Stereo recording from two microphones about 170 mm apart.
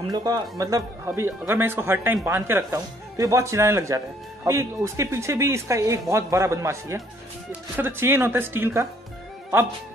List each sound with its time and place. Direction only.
0.1 s speech: 20° right (ahead or behind)